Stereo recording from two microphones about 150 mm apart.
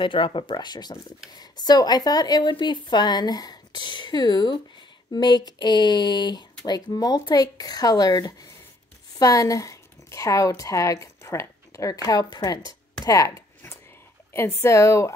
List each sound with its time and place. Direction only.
0.0 s a woman's voice: 35° left (ahead or behind)